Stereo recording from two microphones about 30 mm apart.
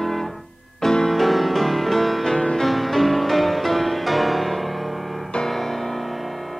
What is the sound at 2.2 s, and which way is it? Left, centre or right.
Music, centre.